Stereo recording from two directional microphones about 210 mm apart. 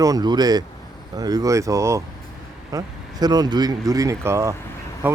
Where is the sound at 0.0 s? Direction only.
20° right (ahead or behind).